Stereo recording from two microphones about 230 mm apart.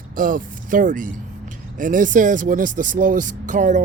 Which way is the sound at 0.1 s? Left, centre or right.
Right.